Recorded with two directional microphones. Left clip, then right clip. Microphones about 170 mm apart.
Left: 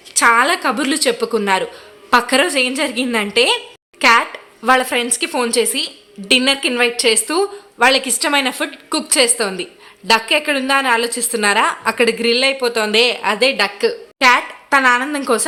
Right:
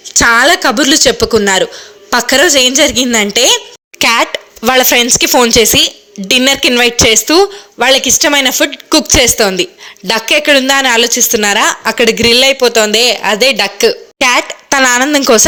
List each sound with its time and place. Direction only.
0.1 s speech: 30° right (ahead or behind)
4.0 s speech: 45° right (ahead or behind)